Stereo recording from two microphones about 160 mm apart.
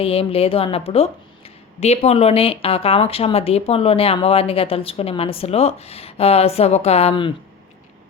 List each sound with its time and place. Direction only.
0.0 s speech: 35° left (ahead or behind)